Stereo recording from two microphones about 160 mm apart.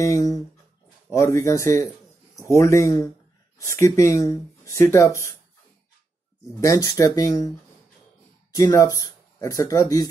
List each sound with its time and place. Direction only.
0.0 s speech: 20° left (ahead or behind)
6.6 s speech: 20° left (ahead or behind)